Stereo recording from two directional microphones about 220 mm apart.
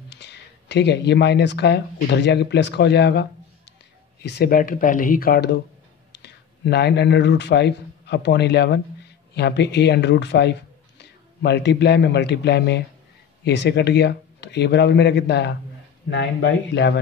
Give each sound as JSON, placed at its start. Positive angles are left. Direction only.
{"t": 0.1, "sound": "a man's voice", "side_deg": 50}